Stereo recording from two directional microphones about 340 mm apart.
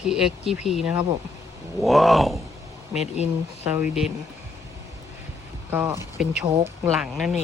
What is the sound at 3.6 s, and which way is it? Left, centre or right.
Speech, centre.